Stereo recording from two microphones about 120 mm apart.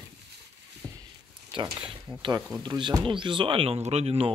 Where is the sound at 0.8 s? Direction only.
30° right (ahead or behind).